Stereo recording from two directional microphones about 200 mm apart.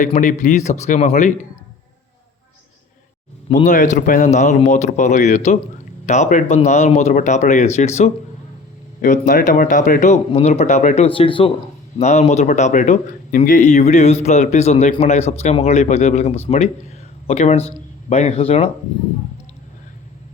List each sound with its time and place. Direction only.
0.0 s speech: 40° left (ahead or behind)
3.5 s speech: 40° left (ahead or behind)
9.2 s speech: 40° left (ahead or behind)